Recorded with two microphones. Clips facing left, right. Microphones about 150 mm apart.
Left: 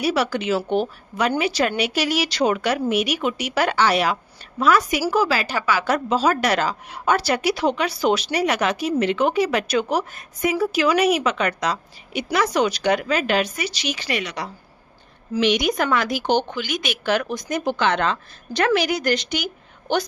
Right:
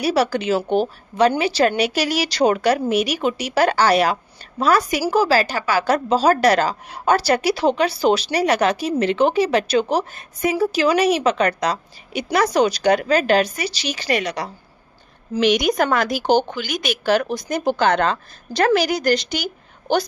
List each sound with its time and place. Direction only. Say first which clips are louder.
0.0 s a woman's voice: right 3 dB; 35° right (ahead or behind)